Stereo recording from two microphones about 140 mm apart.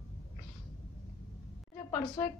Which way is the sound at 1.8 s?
25° left (ahead or behind).